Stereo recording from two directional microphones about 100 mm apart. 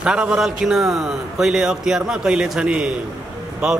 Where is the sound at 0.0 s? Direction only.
10° right (ahead or behind).